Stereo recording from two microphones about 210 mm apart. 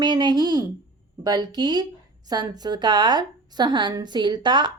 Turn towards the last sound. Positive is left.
turn(degrees=-20)  # may be behind; listen again after turning